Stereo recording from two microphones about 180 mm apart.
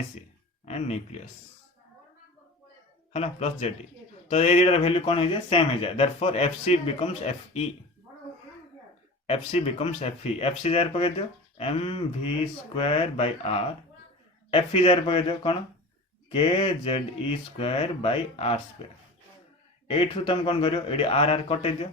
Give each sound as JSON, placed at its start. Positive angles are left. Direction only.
{"t": 0.6, "sound": "speech", "side_deg": 40}
{"t": 3.1, "sound": "speech", "side_deg": 35}
{"t": 9.2, "sound": "speech", "side_deg": 35}
{"t": 19.9, "sound": "speech", "side_deg": 30}